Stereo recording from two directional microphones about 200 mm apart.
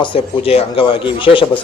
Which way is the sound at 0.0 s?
25° left (ahead or behind).